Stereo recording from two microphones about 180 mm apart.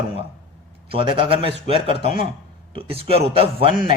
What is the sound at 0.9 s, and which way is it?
Speech, 30° right (ahead or behind).